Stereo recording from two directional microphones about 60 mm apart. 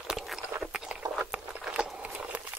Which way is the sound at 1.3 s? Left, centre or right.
Centre.